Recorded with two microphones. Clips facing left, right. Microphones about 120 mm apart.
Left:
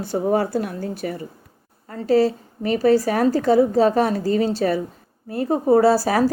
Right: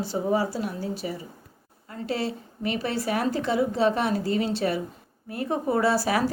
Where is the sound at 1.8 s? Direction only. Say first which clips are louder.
Left 11 dB; 40° left (ahead or behind).